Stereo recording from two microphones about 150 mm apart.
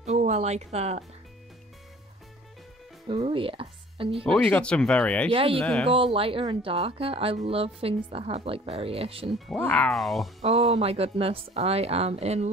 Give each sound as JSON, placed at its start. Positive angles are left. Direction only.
{"t": 0.0, "sound": "speech", "side_deg": -50}
{"t": 3.1, "sound": "speech", "side_deg": -35}
{"t": 4.2, "sound": "speech", "side_deg": 5}
{"t": 5.3, "sound": "speech", "side_deg": -40}
{"t": 5.6, "sound": "speech", "side_deg": 5}
{"t": 5.9, "sound": "speech", "side_deg": -35}
{"t": 9.6, "sound": "speech", "side_deg": 10}
{"t": 10.4, "sound": "a woman's voice", "side_deg": -45}